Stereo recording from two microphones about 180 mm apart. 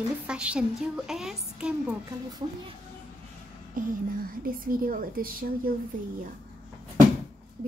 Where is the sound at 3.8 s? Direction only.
45° right (ahead or behind).